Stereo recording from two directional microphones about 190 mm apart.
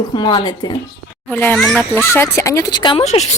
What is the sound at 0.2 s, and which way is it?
Speech, 25° left (ahead or behind).